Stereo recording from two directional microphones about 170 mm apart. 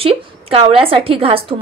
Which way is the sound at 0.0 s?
35° right (ahead or behind).